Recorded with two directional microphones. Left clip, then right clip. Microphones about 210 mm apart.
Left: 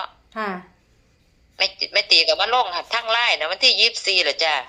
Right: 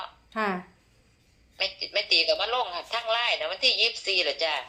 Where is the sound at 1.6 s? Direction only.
50° left (ahead or behind).